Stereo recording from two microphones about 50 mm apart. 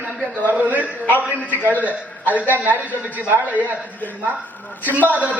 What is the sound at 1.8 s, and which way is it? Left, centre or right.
A man's voice, right.